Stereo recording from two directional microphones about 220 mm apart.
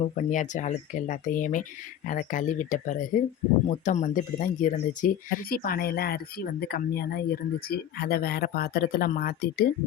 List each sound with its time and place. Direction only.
0.2 s speech: 35° left (ahead or behind)